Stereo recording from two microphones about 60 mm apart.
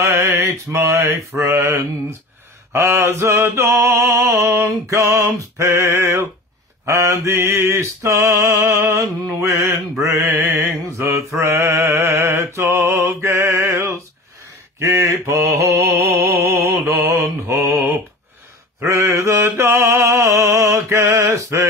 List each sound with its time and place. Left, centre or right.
0.0 s mantra: right
4.1 s music: right
4.4 s a sound: right
5.7 s mantra: right
8.5 s a sound: right
10.0 s mantra: right
11.1 s mantra: right
14.8 s mantra: right
19.1 s mantra: right
20.6 s music: right
21.1 s a sound: right
21.4 s mantra: right